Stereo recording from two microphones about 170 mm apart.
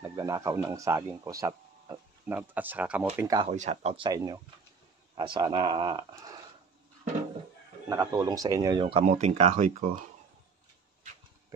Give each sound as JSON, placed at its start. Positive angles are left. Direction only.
{"t": 0.0, "sound": "speech", "side_deg": -20}
{"t": 3.3, "sound": "speech", "side_deg": -40}
{"t": 7.9, "sound": "speech", "side_deg": -20}